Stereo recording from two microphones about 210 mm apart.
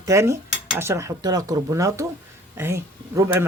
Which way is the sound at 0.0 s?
15° right (ahead or behind).